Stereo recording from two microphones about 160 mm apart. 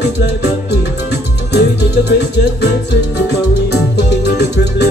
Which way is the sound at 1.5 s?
90° left.